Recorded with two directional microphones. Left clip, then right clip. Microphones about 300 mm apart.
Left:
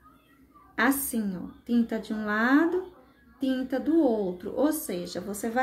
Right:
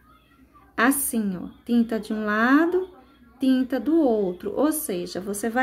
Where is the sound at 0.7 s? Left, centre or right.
Centre.